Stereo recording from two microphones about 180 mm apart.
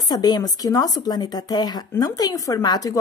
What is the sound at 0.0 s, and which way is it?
Speech, 20° left (ahead or behind).